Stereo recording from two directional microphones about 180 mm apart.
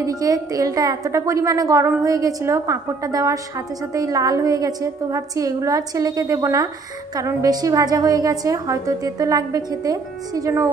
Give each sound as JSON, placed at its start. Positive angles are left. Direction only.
{"t": 0.0, "sound": "a woman's voice", "side_deg": -20}